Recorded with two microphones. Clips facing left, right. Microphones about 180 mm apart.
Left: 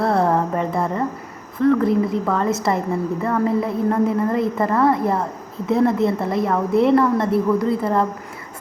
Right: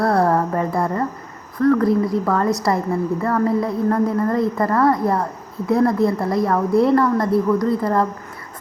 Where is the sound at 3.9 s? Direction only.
20° left (ahead or behind).